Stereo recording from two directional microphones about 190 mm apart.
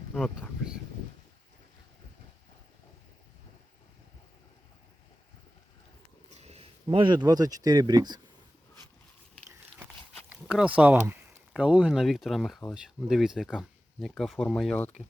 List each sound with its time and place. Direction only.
0.1 s speech: 5° left (ahead or behind)
6.3 s a sound: 35° right (ahead or behind)
6.8 s speech: 25° right (ahead or behind)
10.2 s speech: 5° right (ahead or behind)